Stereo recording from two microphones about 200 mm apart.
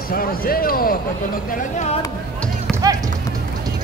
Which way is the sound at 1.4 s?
40° left (ahead or behind).